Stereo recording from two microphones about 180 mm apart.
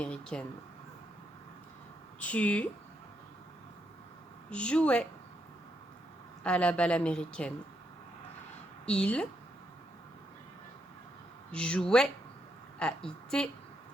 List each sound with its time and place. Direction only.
0.0 s a woman's voice: 5° left (ahead or behind)
2.2 s speech: 5° left (ahead or behind)
4.4 s speech: 5° left (ahead or behind)
6.4 s speech: 5° left (ahead or behind)
8.9 s a woman's voice: 5° left (ahead or behind)
11.5 s a woman's voice: 5° left (ahead or behind)